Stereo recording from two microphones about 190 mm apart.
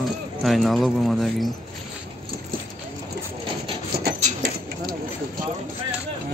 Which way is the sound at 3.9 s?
55° right (ahead or behind).